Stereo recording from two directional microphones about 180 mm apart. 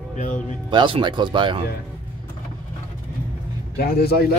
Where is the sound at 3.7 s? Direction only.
60° left (ahead or behind).